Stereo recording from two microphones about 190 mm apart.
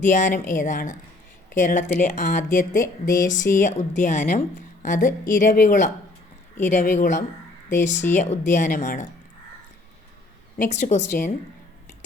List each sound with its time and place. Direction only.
0.0 s a woman's voice: 40° left (ahead or behind)
10.6 s speech: 40° left (ahead or behind)